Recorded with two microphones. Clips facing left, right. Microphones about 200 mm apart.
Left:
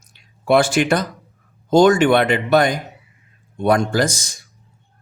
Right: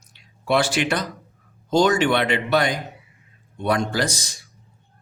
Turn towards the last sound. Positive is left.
turn(degrees=45)  # may be behind; listen again after turning